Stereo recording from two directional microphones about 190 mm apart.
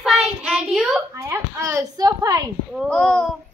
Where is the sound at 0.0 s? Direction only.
Centre (ahead or behind).